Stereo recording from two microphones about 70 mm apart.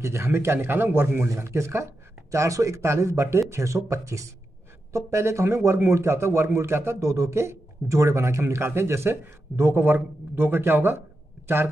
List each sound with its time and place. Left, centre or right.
0.0 s a man's voice: right